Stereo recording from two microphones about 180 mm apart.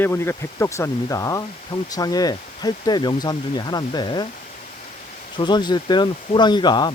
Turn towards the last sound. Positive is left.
turn(degrees=25)  # may be behind; listen again after turning